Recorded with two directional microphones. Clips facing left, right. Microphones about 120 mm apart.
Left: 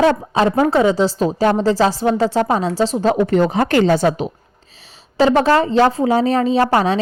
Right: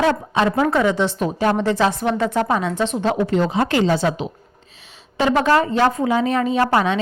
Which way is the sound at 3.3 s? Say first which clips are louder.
Left 3 dB; 55° left (ahead or behind).